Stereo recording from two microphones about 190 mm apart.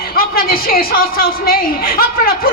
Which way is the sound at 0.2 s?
50° left (ahead or behind).